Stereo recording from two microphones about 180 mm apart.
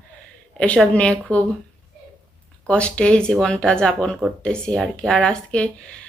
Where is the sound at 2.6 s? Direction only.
5° left (ahead or behind).